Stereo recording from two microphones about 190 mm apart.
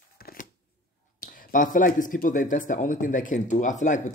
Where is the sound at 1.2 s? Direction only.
50° left (ahead or behind).